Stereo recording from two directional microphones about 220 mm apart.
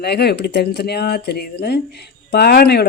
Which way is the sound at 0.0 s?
45° left (ahead or behind).